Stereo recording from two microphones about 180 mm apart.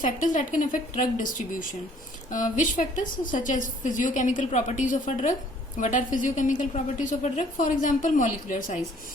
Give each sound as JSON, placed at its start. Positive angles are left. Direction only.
{"t": 0.0, "sound": "a woman's voice", "side_deg": 45}